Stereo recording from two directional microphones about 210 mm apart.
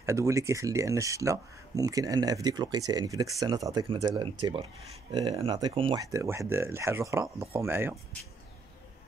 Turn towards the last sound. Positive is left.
turn(degrees=-10)  # may be behind; listen again after turning